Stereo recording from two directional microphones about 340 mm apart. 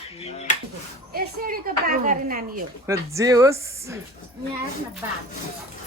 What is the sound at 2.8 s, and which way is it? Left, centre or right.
Speech, centre.